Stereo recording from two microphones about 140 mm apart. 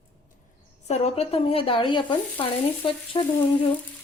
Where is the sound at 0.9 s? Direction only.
50° left (ahead or behind).